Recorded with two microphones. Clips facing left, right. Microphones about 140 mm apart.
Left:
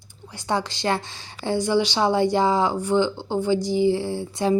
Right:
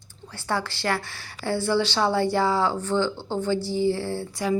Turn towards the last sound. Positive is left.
turn(degrees=15)  # may be behind; listen again after turning